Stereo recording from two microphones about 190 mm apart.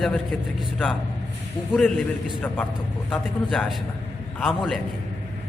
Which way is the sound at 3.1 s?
Centre (ahead or behind).